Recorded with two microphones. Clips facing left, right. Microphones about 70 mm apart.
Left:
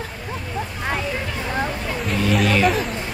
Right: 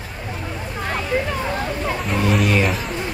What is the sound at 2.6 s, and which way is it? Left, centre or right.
Speech, centre.